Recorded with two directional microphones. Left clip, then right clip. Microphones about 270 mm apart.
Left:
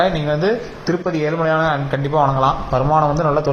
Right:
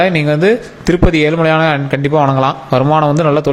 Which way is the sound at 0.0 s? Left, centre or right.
Right.